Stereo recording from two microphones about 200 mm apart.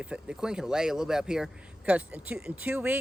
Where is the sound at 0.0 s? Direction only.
5° right (ahead or behind).